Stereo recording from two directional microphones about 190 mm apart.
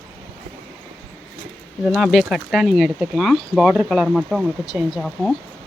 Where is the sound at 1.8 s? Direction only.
5° right (ahead or behind).